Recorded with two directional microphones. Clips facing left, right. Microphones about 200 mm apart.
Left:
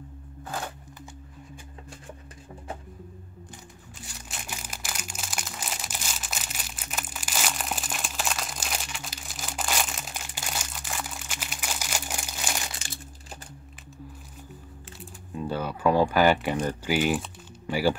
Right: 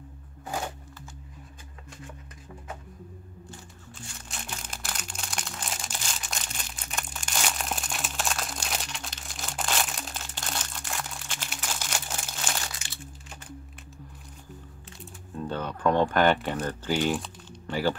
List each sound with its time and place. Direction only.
4.3 s crumpling: 5° left (ahead or behind)
12.7 s crumpling: 40° left (ahead or behind)
15.3 s speech: 10° left (ahead or behind)